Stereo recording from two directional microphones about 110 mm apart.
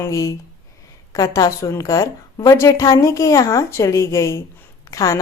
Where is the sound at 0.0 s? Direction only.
25° left (ahead or behind).